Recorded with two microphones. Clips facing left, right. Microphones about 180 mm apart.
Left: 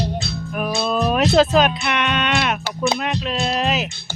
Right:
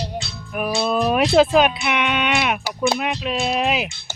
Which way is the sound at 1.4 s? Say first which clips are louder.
Right 2 dB; 10° right (ahead or behind).